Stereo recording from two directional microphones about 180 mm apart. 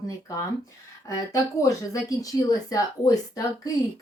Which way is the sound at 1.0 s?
20° left (ahead or behind).